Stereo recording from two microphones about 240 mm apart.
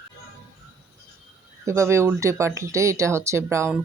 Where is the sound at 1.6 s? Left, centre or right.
Centre.